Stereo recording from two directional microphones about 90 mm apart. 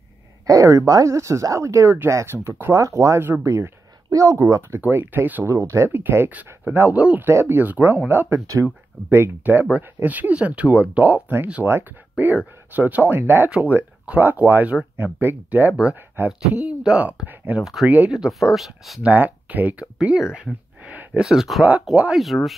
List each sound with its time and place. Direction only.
0.5 s speech: 35° right (ahead or behind); by 18.1 s 15° right (ahead or behind)
18.1 s speech: 5° right (ahead or behind)
19.0 s speech: 20° right (ahead or behind); by 21.6 s 5° right (ahead or behind)
21.9 s speech: 15° right (ahead or behind)
22.2 s speech: centre (ahead or behind)